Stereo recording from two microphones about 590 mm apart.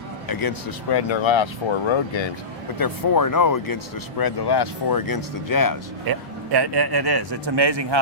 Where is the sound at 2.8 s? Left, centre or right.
Left.